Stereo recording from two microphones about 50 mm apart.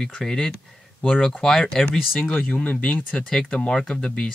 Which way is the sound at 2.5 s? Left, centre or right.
Left.